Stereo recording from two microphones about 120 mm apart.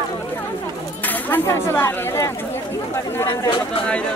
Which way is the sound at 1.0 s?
15° left (ahead or behind).